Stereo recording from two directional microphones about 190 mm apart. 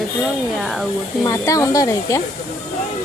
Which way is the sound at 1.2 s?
15° left (ahead or behind).